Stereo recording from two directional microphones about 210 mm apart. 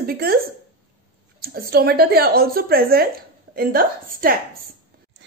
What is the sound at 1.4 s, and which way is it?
A woman's voice, 45° right (ahead or behind).